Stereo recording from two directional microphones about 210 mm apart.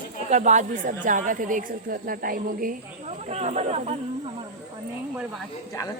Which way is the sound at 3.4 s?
30° right (ahead or behind).